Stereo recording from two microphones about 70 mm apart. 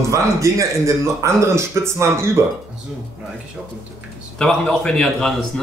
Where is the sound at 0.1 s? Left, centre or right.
Right.